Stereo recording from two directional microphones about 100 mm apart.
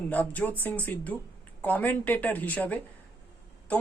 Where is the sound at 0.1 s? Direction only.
15° left (ahead or behind).